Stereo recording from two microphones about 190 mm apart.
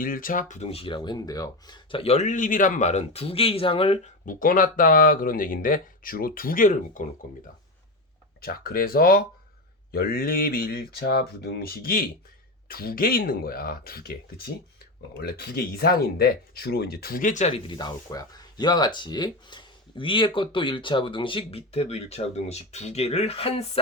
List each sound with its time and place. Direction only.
0.0 s speech: 45° left (ahead or behind); by 4.1 s 30° left (ahead or behind)
4.3 s speech: 45° left (ahead or behind)
8.4 s speech: 50° left (ahead or behind)
17.7 s speech: 20° left (ahead or behind)